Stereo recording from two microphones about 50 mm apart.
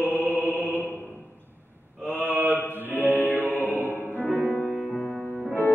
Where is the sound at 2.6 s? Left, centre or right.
Left.